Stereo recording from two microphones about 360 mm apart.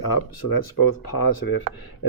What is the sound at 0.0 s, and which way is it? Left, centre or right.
Speech, left.